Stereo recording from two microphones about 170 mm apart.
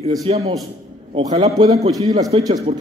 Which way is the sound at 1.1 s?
25° right (ahead or behind).